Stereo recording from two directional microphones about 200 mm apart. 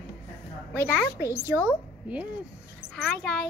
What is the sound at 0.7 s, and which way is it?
Speech, 5° left (ahead or behind).